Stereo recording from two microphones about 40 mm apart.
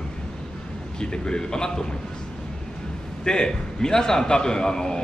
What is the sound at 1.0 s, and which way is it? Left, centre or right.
Speech, centre.